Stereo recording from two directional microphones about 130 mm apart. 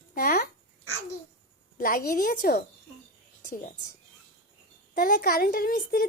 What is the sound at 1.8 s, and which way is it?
Speech, 90° left.